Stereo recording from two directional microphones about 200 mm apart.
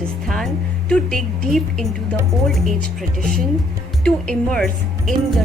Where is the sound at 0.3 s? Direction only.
Centre (ahead or behind).